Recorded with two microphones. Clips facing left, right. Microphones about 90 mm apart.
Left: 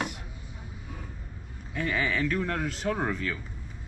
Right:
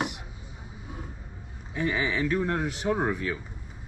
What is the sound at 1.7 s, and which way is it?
Speech, 15° right (ahead or behind).